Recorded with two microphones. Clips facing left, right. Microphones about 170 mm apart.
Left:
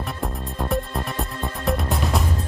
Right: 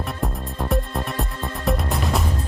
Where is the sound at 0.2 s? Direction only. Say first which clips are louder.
Right 1 dB; centre (ahead or behind).